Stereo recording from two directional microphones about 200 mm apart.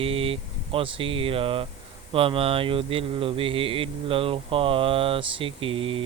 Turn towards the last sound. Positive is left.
turn(degrees=-25)  # may be behind; listen again after turning